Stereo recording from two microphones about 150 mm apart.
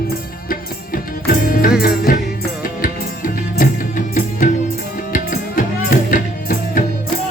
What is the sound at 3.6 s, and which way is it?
Music, 60° left (ahead or behind).